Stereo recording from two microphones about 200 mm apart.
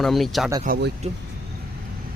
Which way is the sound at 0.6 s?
50° right (ahead or behind).